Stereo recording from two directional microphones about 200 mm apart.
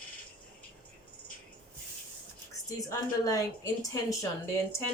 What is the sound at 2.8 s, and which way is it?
Speech, 15° left (ahead or behind).